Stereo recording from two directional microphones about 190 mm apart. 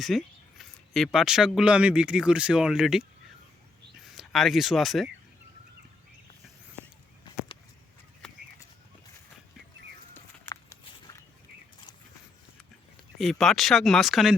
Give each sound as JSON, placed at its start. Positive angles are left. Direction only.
{"t": 0.0, "sound": "speech", "side_deg": 0}
{"t": 4.0, "sound": "speech", "side_deg": 0}
{"t": 10.2, "sound": "walk", "side_deg": 15}
{"t": 13.1, "sound": "speech", "side_deg": 0}